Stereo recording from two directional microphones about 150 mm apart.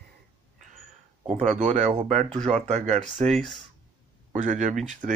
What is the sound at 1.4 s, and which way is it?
Speech, 55° right (ahead or behind).